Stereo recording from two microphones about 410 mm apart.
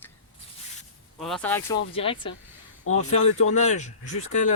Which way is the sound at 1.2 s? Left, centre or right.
Centre.